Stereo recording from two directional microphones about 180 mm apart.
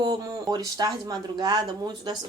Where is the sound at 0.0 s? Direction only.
20° right (ahead or behind).